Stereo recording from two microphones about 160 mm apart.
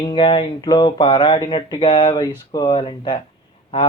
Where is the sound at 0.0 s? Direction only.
30° left (ahead or behind).